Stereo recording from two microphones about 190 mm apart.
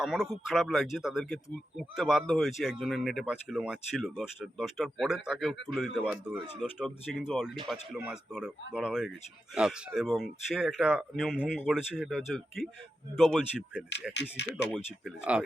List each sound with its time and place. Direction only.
0.0 s speech: centre (ahead or behind)
14.1 s speech: 65° left (ahead or behind)
14.5 s speech: centre (ahead or behind)